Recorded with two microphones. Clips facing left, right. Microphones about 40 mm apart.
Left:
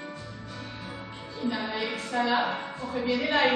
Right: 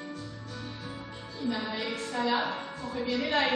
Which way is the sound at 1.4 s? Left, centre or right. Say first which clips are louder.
Left 2 dB; centre.